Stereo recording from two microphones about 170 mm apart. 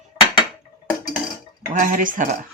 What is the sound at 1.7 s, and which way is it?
Speech, 50° right (ahead or behind).